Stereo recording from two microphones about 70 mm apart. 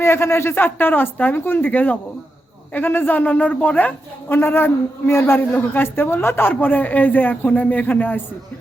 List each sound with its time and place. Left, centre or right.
0.0 s a man's voice: left